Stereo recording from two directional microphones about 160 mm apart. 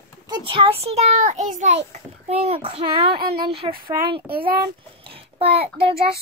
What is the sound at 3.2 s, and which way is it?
Speech, 70° right (ahead or behind).